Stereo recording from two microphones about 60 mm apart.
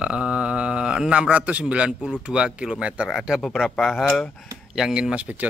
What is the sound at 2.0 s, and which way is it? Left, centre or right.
Speech, centre.